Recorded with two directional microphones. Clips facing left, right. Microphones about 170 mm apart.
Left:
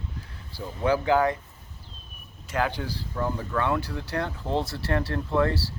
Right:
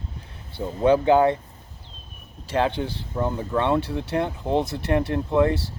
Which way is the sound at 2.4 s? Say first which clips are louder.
Right 5 dB; 30° right (ahead or behind).